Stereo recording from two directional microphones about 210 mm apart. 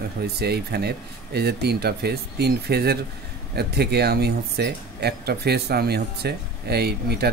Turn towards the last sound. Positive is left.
turn(degrees=-50)  # may be behind; listen again after turning